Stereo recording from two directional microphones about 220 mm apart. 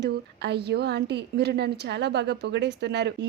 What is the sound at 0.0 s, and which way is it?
A woman's voice, 50° right (ahead or behind).